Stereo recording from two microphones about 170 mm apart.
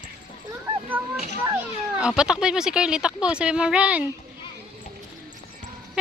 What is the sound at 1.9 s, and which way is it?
Speech, 5° right (ahead or behind).